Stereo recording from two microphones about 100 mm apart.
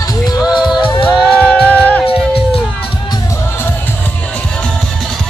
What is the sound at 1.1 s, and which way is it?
Music, 15° left (ahead or behind).